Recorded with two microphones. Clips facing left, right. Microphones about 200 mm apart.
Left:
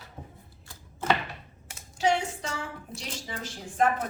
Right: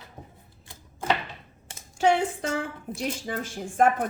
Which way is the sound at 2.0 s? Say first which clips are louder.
Right 4 dB; 55° right (ahead or behind).